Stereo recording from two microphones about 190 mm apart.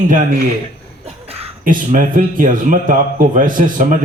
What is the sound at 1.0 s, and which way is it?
Throat clearing, 30° right (ahead or behind).